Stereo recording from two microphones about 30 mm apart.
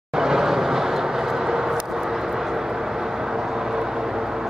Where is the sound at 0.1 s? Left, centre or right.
Centre.